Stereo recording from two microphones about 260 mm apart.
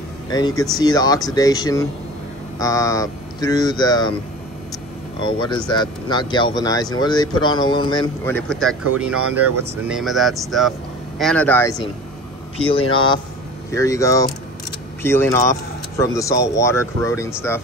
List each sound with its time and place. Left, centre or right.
0.3 s speech: centre
5.2 s speech: centre
8.4 s speech: centre
9.8 s a man's voice: centre